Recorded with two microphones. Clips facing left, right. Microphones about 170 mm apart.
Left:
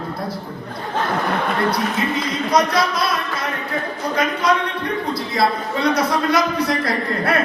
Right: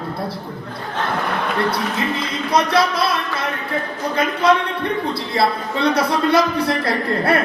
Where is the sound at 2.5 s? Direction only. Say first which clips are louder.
Right 1 dB; 30° right (ahead or behind).